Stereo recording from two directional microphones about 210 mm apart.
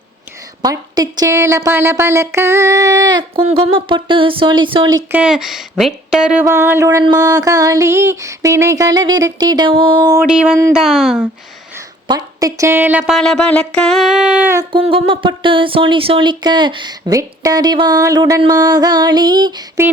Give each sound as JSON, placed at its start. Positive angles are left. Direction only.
{"t": 0.6, "sound": "a woman's voice", "side_deg": -20}
{"t": 5.1, "sound": "a woman's voice", "side_deg": -5}
{"t": 10.2, "sound": "a woman's voice", "side_deg": -5}
{"t": 12.0, "sound": "a woman's voice", "side_deg": -20}
{"t": 14.7, "sound": "speech", "side_deg": -25}